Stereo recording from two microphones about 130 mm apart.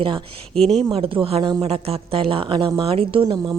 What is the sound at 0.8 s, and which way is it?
A woman's voice, 45° right (ahead or behind).